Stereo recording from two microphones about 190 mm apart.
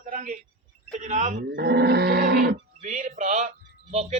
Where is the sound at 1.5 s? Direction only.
60° right (ahead or behind).